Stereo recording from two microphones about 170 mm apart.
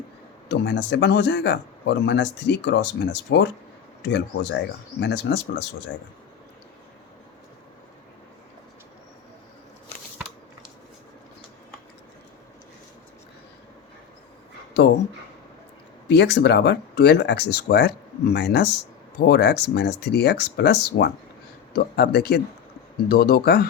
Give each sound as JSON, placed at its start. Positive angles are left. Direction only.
{"t": 0.4, "sound": "a man's voice", "side_deg": 90}
{"t": 16.0, "sound": "speech", "side_deg": 90}
{"t": 21.7, "sound": "speech", "side_deg": 65}